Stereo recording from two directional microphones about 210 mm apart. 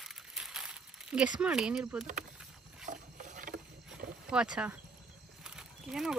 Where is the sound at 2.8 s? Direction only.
40° right (ahead or behind).